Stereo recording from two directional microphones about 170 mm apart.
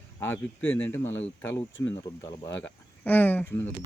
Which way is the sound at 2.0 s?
20° left (ahead or behind).